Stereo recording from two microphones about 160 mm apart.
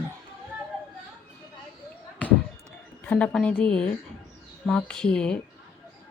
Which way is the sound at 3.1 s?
10° left (ahead or behind).